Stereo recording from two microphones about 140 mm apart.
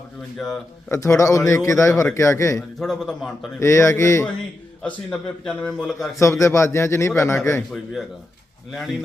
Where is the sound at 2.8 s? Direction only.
Centre (ahead or behind).